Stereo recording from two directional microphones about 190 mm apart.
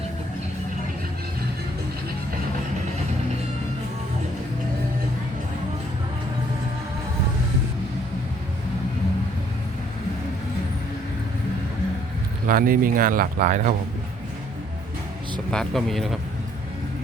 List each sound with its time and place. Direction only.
12.5 s speech: 45° right (ahead or behind)
15.4 s speech: centre (ahead or behind)